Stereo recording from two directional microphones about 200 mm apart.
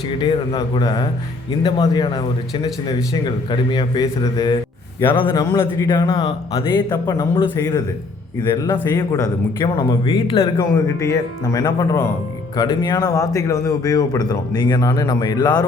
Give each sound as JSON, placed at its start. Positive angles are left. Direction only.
{"t": 0.2, "sound": "speech", "side_deg": 20}